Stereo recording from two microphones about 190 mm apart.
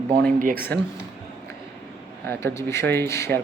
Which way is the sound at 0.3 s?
45° right (ahead or behind).